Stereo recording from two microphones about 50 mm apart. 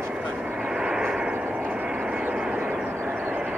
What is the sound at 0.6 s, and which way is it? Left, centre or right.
Vehicle, centre.